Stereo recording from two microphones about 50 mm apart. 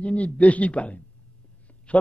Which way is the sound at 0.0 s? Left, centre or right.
Left.